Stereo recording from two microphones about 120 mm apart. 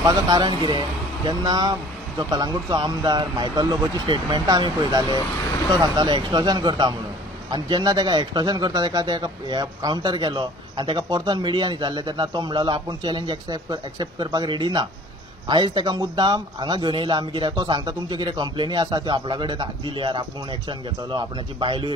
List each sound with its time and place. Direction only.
0.0 s speech: 35° right (ahead or behind)